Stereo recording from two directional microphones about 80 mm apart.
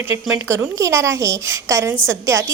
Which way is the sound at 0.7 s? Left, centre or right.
Right.